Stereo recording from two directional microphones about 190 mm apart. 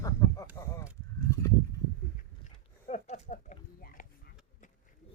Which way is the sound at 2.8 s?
40° left (ahead or behind).